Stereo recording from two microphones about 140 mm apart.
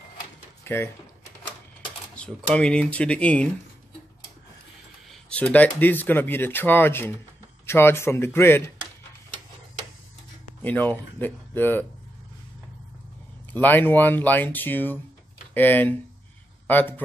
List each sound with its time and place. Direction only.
0.7 s speech: 15° left (ahead or behind)
2.1 s speech: 5° left (ahead or behind)
5.3 s speech: 10° left (ahead or behind)
10.6 s speech: 10° left (ahead or behind)
13.5 s speech: 15° left (ahead or behind)